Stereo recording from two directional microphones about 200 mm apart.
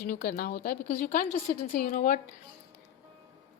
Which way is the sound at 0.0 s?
50° left (ahead or behind).